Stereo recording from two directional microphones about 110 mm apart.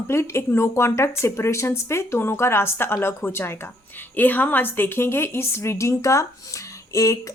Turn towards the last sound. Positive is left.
turn(degrees=30)  # may be behind; listen again after turning